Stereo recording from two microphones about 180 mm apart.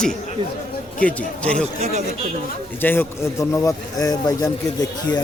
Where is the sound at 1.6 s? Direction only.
40° right (ahead or behind).